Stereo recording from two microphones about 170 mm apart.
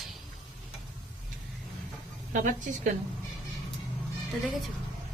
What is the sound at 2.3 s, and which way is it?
Speech, 50° right (ahead or behind).